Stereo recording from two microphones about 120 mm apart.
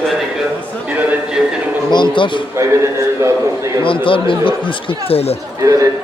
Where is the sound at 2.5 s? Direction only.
25° right (ahead or behind).